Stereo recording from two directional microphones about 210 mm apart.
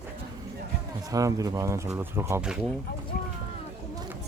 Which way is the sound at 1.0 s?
15° right (ahead or behind).